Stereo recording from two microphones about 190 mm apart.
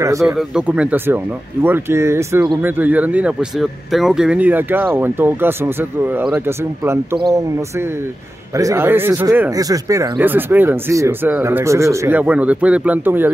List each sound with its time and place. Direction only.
0.0 s speech: 15° right (ahead or behind)
0.3 s speech: 5° right (ahead or behind)
8.5 s speech: 15° right (ahead or behind)